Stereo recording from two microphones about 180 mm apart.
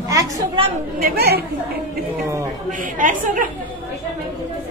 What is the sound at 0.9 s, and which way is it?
Speech, 60° right (ahead or behind).